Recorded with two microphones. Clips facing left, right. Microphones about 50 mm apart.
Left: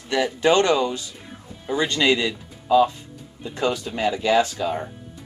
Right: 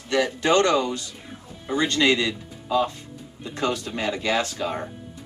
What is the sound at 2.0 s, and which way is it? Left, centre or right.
Speech, centre.